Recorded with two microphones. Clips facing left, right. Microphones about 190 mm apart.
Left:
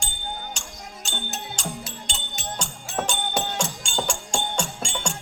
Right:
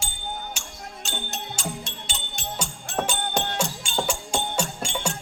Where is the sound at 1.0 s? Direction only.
5° right (ahead or behind).